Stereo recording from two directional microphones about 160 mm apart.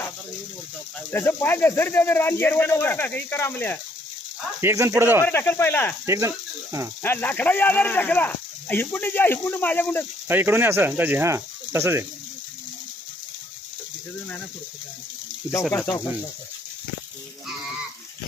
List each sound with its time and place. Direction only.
1.1 s speech: 15° left (ahead or behind)
4.6 s speech: 20° right (ahead or behind)
5.2 s speech: 15° left (ahead or behind)
6.1 s speech: 20° right (ahead or behind)
7.0 s speech: 15° left (ahead or behind)
10.2 s speech: 15° right (ahead or behind)